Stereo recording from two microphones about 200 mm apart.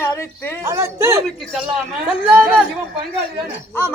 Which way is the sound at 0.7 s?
15° right (ahead or behind).